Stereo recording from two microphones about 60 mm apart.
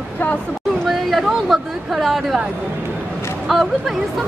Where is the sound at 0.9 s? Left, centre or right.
Centre.